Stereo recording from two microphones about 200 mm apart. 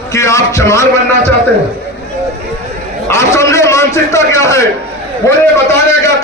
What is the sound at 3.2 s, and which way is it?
A man's voice, 15° left (ahead or behind).